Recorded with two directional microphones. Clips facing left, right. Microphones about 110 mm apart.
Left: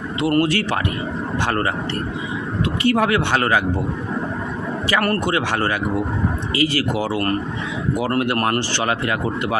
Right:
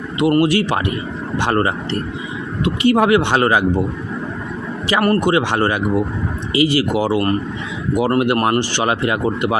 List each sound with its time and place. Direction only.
0.2 s speech: 15° right (ahead or behind)
4.9 s speech: 15° right (ahead or behind)